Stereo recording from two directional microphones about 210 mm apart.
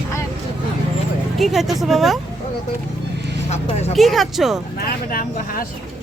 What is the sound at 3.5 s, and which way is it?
Speech, 30° left (ahead or behind).